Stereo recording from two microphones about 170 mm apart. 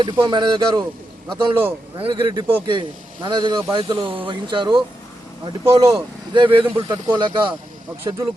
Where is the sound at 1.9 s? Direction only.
30° right (ahead or behind).